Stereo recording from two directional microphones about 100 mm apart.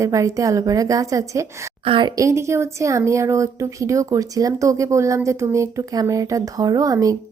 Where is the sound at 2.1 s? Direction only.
30° right (ahead or behind).